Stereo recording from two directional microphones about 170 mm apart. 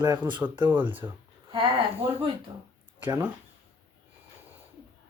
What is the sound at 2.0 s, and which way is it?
Female singing, 35° right (ahead or behind).